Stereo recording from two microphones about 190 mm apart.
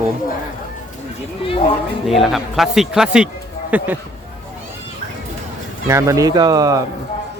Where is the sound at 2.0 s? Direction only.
Centre (ahead or behind).